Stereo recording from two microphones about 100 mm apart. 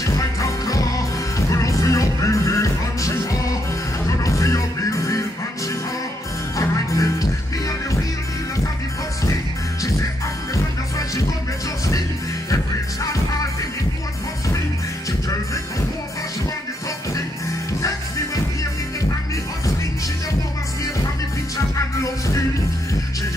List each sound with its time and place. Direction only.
0.0 s music: 35° left (ahead or behind)
6.5 s music: 35° left (ahead or behind)
10.5 s music: 35° left (ahead or behind)
17.8 s music: 35° left (ahead or behind)